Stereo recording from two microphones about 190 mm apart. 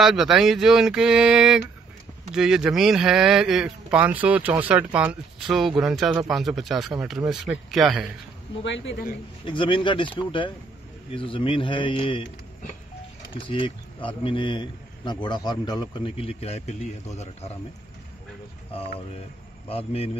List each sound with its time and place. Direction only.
0.0 s speech: centre (ahead or behind)
8.6 s a man's voice: 70° left (ahead or behind)
9.5 s speech: 25° left (ahead or behind)
11.1 s speech: 25° left (ahead or behind)
13.5 s a man's voice: 25° left (ahead or behind)
18.7 s a man's voice: 30° left (ahead or behind)